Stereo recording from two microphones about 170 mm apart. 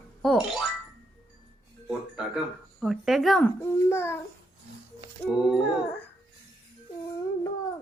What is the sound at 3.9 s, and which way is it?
Speech, 15° left (ahead or behind).